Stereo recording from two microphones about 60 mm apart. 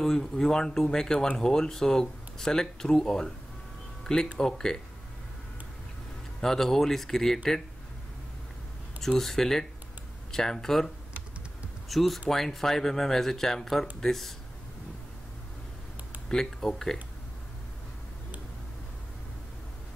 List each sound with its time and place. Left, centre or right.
0.0 s speech: centre
4.0 s a sound: centre
4.4 s speech: centre
6.4 s speech: centre
9.0 s speech: centre
11.9 s speech: centre
16.3 s speech: centre